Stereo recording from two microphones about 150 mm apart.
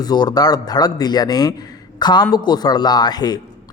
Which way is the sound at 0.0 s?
25° left (ahead or behind).